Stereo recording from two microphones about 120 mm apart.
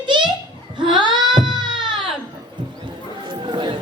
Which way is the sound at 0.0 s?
40° right (ahead or behind).